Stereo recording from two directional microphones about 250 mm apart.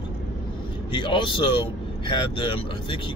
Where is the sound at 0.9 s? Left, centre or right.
Centre.